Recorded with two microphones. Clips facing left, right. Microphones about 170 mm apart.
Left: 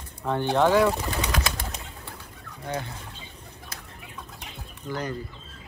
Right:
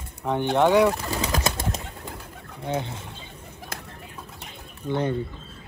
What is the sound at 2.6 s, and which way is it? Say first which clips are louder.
Speech: right 4 dB; 25° right (ahead or behind).